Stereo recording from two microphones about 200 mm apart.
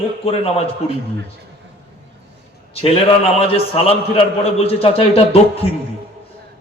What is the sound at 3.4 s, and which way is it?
A man's voice, 30° left (ahead or behind).